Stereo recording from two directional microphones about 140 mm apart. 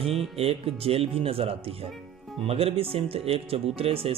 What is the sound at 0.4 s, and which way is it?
Speech, 45° right (ahead or behind).